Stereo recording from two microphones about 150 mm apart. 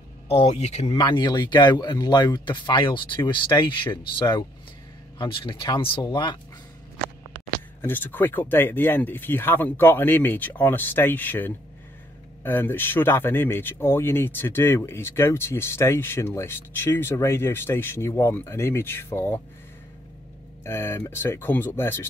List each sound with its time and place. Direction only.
0.3 s speech: 45° left (ahead or behind)
7.8 s speech: 10° left (ahead or behind)
20.6 s speech: 15° left (ahead or behind)